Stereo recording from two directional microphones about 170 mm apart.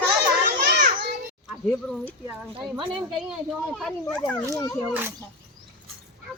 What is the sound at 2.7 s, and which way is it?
Speech, 30° right (ahead or behind).